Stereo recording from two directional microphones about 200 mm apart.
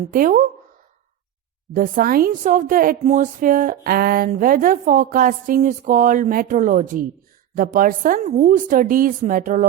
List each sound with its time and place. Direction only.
0.1 s a woman's voice: 40° right (ahead or behind)
1.7 s a woman's voice: 45° right (ahead or behind)